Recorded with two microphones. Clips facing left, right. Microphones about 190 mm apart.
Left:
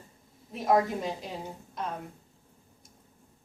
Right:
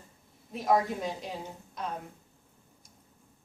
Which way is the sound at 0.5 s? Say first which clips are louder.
Left 2 dB; centre (ahead or behind).